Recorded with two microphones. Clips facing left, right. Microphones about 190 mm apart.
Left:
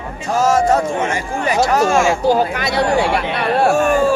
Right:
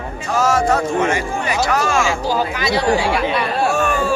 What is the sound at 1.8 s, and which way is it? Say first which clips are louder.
Speech: left 4 dB; 25° left (ahead or behind).